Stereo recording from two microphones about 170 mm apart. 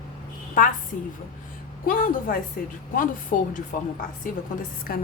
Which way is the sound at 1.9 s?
55° left (ahead or behind).